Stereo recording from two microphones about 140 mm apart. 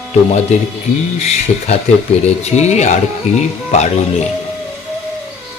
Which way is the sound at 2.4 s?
55° left (ahead or behind).